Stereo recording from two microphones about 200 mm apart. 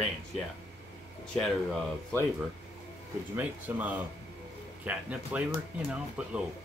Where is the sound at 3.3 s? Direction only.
10° right (ahead or behind).